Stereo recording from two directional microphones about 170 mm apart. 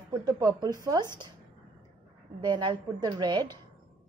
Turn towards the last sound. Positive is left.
turn(degrees=-25)  # may be behind; listen again after turning